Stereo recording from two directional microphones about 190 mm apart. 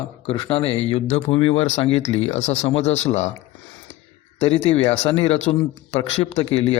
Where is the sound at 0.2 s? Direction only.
30° left (ahead or behind).